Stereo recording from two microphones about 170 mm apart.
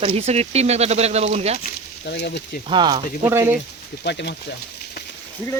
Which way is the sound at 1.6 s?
75° left (ahead or behind).